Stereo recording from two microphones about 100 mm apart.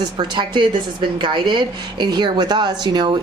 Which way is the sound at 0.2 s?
50° right (ahead or behind).